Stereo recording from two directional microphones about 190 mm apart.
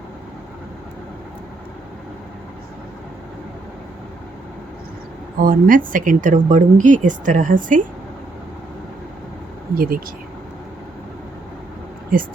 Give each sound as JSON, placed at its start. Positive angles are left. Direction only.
{"t": 5.4, "sound": "speech", "side_deg": -45}
{"t": 9.7, "sound": "speech", "side_deg": -50}
{"t": 12.1, "sound": "speech", "side_deg": -50}